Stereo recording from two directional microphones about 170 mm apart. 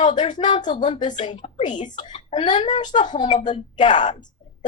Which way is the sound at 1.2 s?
45° left (ahead or behind).